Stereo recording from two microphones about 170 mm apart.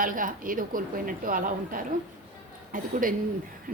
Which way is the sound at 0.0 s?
55° right (ahead or behind).